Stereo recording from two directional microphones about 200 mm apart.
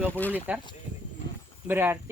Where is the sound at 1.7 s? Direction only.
10° right (ahead or behind).